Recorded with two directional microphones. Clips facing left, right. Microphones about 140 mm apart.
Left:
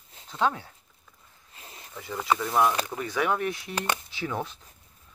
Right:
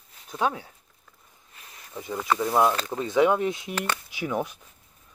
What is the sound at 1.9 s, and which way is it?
Speech, 20° right (ahead or behind).